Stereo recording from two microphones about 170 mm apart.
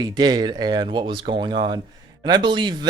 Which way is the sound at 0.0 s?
25° right (ahead or behind).